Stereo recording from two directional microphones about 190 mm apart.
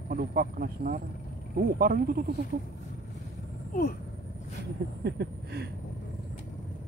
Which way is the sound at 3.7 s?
50° left (ahead or behind).